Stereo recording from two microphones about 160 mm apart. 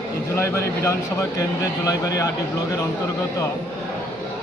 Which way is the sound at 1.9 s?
20° left (ahead or behind).